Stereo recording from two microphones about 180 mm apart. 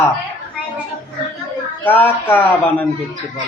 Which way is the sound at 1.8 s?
10° left (ahead or behind).